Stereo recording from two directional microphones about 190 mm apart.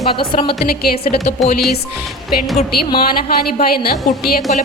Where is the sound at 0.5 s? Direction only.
55° left (ahead or behind).